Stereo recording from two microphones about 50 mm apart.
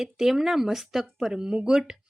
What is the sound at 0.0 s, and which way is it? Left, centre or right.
Speech, centre.